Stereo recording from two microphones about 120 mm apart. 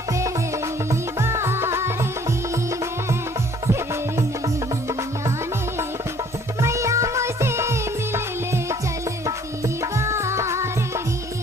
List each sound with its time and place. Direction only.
1.2 s music: 20° right (ahead or behind)
6.6 s music: 25° right (ahead or behind)
10.0 s music: 25° right (ahead or behind)